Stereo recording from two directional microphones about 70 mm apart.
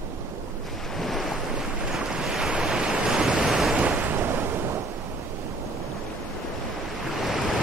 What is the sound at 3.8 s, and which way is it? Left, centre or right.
Waves, right.